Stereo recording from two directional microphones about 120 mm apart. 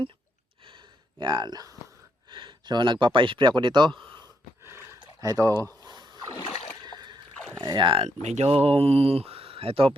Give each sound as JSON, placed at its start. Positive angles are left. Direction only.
{"t": 0.6, "sound": "gasp", "side_deg": -45}
{"t": 2.3, "sound": "speech", "side_deg": -45}
{"t": 4.6, "sound": "a sound", "side_deg": -20}
{"t": 6.5, "sound": "splash", "side_deg": 55}
{"t": 6.8, "sound": "a sound", "side_deg": -35}
{"t": 7.6, "sound": "speech", "side_deg": -40}
{"t": 8.0, "sound": "speech", "side_deg": -70}